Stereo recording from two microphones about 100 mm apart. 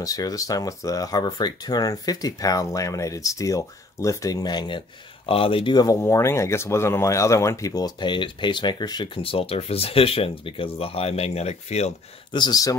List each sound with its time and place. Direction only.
0.0 s speech: 35° left (ahead or behind)
5.3 s speech: 65° left (ahead or behind)
5.9 s speech: 30° left (ahead or behind); by 12.4 s 90° left
12.4 s speech: 40° left (ahead or behind)